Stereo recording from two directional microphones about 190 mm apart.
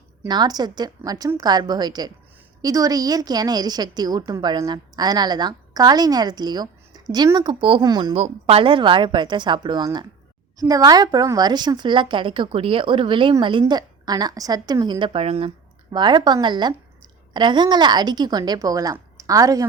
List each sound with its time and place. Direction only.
0.2 s a woman's voice: 20° right (ahead or behind)
8.1 s a woman's voice: 30° right (ahead or behind)